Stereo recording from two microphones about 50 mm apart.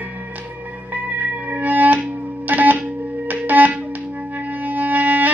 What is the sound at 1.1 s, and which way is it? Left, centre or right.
Music, right.